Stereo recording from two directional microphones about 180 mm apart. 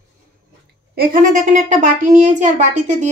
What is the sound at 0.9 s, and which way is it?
Speech, 55° right (ahead or behind).